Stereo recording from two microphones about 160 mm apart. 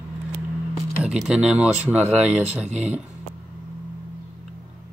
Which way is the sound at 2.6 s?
45° right (ahead or behind).